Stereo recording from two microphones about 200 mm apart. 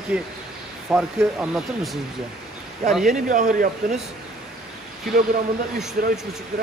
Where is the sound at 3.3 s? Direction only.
40° right (ahead or behind).